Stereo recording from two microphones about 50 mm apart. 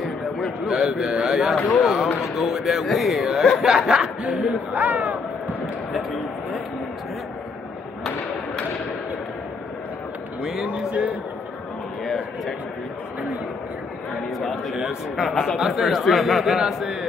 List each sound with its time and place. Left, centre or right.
0.7 s a man's voice: centre
4.7 s speech: right
10.4 s a man's voice: centre
12.0 s a sound: centre
14.4 s a sound: centre
15.1 s a man's voice: centre